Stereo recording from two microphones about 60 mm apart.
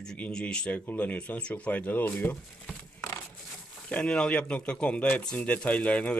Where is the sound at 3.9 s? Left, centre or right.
Centre.